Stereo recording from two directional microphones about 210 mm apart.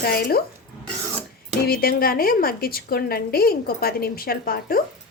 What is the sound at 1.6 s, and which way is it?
A woman's voice, 45° left (ahead or behind).